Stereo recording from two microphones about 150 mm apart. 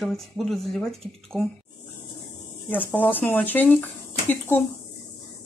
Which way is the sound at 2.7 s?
10° left (ahead or behind).